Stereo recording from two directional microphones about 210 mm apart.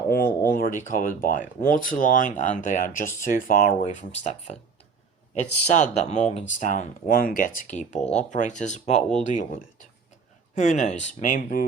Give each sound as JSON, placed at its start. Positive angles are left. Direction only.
{"t": 0.1, "sound": "speech", "side_deg": 45}
{"t": 5.6, "sound": "speech", "side_deg": 35}